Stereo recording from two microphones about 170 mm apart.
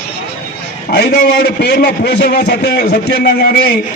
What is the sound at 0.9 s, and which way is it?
A man's voice, 85° left.